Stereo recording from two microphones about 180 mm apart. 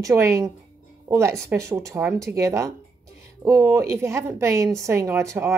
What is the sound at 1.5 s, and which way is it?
A woman's voice, 15° right (ahead or behind).